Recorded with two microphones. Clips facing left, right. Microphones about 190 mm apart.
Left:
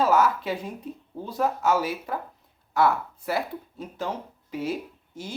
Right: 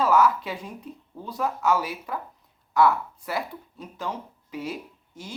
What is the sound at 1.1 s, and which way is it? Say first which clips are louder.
Speech: left 3 dB; 30° left (ahead or behind).